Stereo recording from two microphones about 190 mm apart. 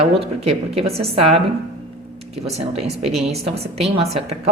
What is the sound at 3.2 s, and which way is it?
Speech, 30° right (ahead or behind).